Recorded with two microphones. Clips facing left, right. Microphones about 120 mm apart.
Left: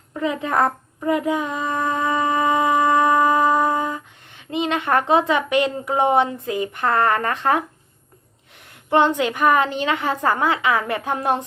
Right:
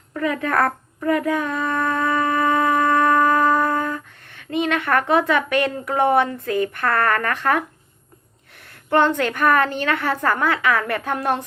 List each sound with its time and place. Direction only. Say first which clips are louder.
0.1 s a child's voice: right 1 dB; 20° left (ahead or behind)
8.9 s a woman's voice: even; 15° left (ahead or behind)